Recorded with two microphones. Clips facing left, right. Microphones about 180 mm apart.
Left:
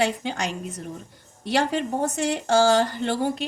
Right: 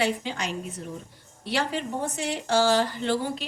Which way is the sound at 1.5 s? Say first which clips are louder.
Left 5 dB; 45° left (ahead or behind).